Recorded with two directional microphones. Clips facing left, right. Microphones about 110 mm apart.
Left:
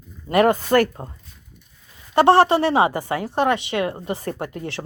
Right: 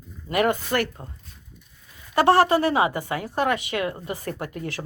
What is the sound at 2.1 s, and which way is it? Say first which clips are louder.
Speech: left 3 dB; 25° left (ahead or behind).